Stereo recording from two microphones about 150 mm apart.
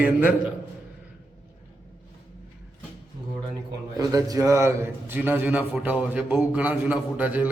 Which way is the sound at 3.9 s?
25° right (ahead or behind).